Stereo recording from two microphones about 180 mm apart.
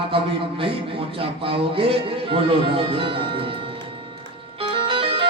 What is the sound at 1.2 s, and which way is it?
Speech, 30° right (ahead or behind).